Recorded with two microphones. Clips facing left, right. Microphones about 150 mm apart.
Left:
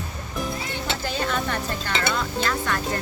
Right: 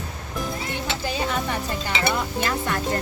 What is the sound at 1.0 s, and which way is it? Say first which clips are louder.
Speech: right 1 dB; 5° right (ahead or behind).